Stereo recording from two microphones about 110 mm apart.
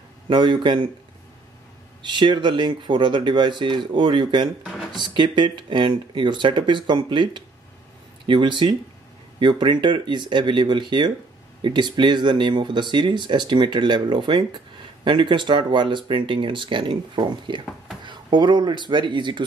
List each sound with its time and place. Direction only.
0.3 s speech: 45° right (ahead or behind)
2.0 s speech: 45° right (ahead or behind)
4.6 s drawer open or close: 5° right (ahead or behind)
5.0 s speech: 45° right (ahead or behind)